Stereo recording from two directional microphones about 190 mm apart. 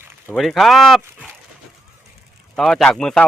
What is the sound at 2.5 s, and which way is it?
Speech, 5° left (ahead or behind).